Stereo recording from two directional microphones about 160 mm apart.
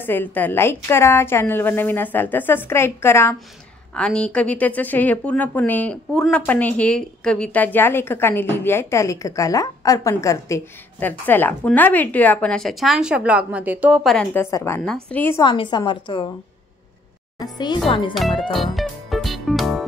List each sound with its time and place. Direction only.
0.0 s a woman's voice: 10° left (ahead or behind); by 14.0 s 10° right (ahead or behind)
14.0 s a woman's voice: 5° left (ahead or behind)
15.4 s a woman's voice: 30° left (ahead or behind)
17.4 s a woman's voice: 25° left (ahead or behind)
18.5 s music: centre (ahead or behind)